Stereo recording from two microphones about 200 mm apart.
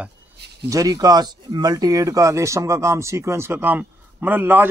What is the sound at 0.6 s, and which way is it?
Speech, 15° right (ahead or behind).